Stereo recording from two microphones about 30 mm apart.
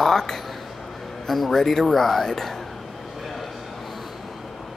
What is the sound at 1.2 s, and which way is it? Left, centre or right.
Speech, centre.